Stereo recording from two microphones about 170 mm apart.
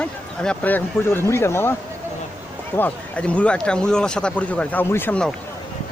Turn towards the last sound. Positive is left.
turn(degrees=10)  # may be behind; listen again after turning